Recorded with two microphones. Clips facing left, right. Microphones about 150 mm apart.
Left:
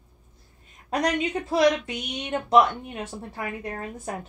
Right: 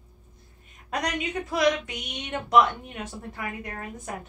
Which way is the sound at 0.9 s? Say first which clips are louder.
Left 5 dB; 30° left (ahead or behind).